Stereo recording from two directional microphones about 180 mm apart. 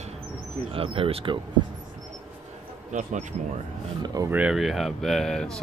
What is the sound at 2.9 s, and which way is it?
Speech, 40° right (ahead or behind).